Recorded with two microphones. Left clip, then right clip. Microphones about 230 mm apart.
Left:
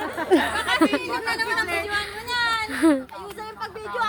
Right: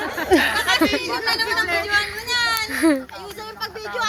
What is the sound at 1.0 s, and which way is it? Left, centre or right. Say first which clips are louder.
Speech: right 3 dB; left.